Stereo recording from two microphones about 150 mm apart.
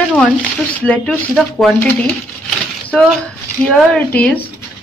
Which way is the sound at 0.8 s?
5° left (ahead or behind).